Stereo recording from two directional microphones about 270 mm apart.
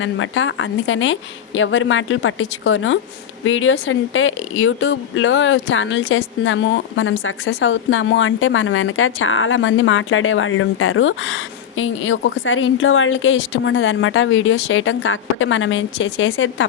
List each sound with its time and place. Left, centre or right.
0.0 s a woman's voice: left